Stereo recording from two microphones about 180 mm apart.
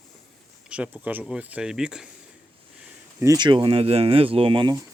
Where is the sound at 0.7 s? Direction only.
5° right (ahead or behind).